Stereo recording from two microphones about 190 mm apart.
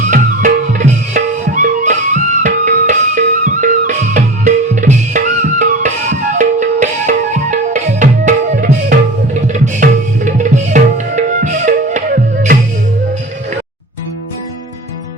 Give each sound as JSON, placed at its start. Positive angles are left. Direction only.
{"t": 0.1, "sound": "music", "side_deg": -45}